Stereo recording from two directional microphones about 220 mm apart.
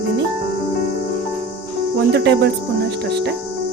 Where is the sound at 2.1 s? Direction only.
50° right (ahead or behind).